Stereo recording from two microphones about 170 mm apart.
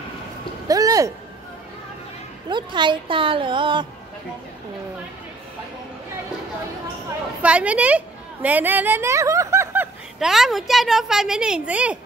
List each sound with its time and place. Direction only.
0.7 s a sound: 20° right (ahead or behind)
2.5 s a woman's voice: 25° right (ahead or behind)
7.4 s a woman's voice: 5° right (ahead or behind)
10.1 s a woman's voice: centre (ahead or behind)